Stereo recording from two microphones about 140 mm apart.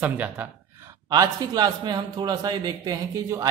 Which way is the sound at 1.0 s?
30° right (ahead or behind).